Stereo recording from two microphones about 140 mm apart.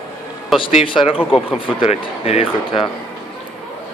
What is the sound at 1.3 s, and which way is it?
Speech, 40° left (ahead or behind).